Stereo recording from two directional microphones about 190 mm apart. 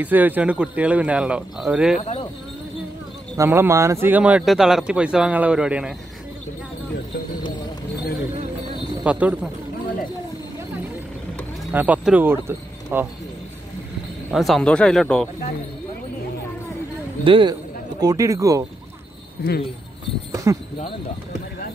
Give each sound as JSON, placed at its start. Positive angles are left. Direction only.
{"t": 0.0, "sound": "speech", "side_deg": -10}
{"t": 2.0, "sound": "speech", "side_deg": 35}
{"t": 3.3, "sound": "speech", "side_deg": -15}
{"t": 9.0, "sound": "speech", "side_deg": -5}
{"t": 11.7, "sound": "speech", "side_deg": -10}
{"t": 14.3, "sound": "speech", "side_deg": 0}
{"t": 17.2, "sound": "speech", "side_deg": -25}
{"t": 19.4, "sound": "speech", "side_deg": 60}
{"t": 20.5, "sound": "speech", "side_deg": -15}